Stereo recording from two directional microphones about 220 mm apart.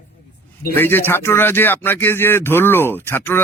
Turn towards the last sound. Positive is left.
turn(degrees=10)  # may be behind; listen again after turning